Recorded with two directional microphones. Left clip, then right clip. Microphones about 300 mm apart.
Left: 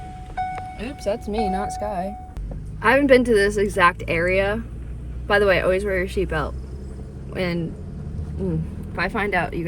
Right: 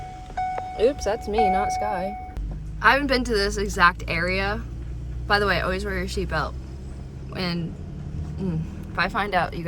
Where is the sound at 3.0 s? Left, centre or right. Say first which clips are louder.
Left 7 dB; centre.